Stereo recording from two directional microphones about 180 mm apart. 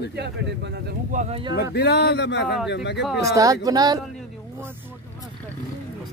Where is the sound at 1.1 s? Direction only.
40° right (ahead or behind).